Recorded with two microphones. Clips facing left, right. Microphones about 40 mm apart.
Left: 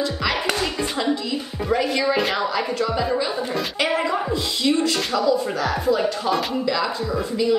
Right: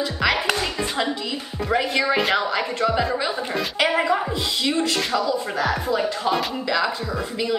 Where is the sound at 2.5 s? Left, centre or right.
Right.